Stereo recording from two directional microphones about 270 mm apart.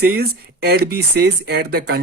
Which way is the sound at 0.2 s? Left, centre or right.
Right.